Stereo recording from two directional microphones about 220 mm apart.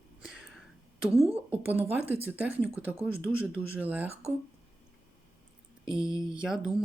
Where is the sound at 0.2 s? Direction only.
Centre (ahead or behind).